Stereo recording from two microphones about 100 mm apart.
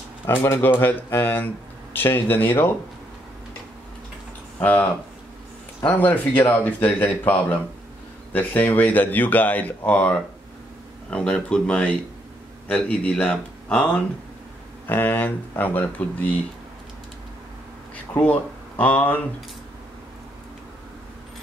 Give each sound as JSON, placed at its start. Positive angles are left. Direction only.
{"t": 0.4, "sound": "speech", "side_deg": 25}
{"t": 4.6, "sound": "speech", "side_deg": 15}
{"t": 5.9, "sound": "speech", "side_deg": 15}
{"t": 18.1, "sound": "speech", "side_deg": 15}